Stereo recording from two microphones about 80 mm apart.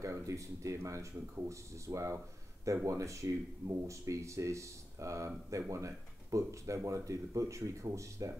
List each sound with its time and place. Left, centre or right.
0.0 s speech: right